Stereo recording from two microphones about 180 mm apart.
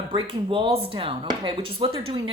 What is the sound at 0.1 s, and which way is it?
A woman's voice, 30° right (ahead or behind).